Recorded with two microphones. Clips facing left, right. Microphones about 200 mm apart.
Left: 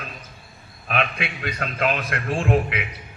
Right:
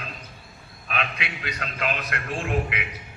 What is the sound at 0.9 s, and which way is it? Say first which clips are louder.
A man's voice: left 5 dB; 50° left (ahead or behind).